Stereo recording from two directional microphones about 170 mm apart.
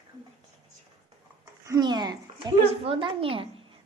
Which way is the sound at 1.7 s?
25° right (ahead or behind).